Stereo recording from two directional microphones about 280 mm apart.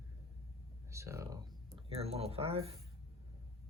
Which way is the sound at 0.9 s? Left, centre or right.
Centre.